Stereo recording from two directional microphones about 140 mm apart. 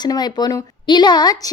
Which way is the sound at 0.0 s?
30° left (ahead or behind).